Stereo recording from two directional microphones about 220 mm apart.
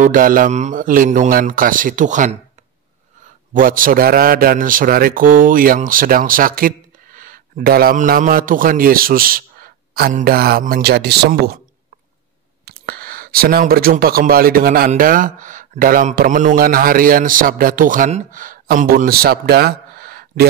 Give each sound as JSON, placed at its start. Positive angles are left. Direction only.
{"t": 0.0, "sound": "a man's voice", "side_deg": -40}
{"t": 3.5, "sound": "a man's voice", "side_deg": -40}
{"t": 12.6, "sound": "speech", "side_deg": -45}